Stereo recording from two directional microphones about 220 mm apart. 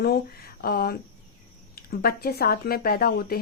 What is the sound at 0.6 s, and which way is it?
Speech, 45° left (ahead or behind).